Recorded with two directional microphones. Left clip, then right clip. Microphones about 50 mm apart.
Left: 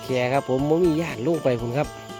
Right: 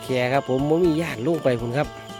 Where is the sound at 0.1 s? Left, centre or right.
Right.